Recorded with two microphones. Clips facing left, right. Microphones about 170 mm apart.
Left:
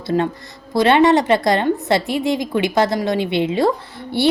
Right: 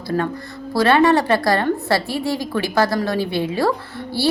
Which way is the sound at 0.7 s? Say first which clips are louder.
Left 2 dB; 20° left (ahead or behind).